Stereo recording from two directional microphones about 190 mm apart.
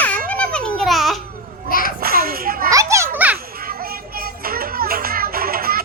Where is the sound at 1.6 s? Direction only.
50° left (ahead or behind).